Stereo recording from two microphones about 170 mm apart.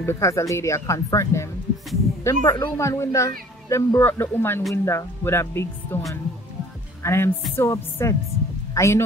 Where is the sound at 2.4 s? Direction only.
20° left (ahead or behind).